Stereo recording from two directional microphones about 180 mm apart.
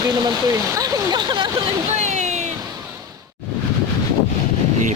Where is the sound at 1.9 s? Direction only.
40° right (ahead or behind).